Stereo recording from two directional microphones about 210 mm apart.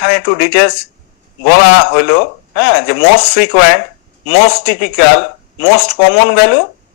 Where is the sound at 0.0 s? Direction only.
50° left (ahead or behind).